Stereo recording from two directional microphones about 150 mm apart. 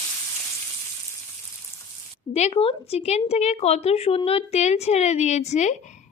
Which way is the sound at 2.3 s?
45° left (ahead or behind).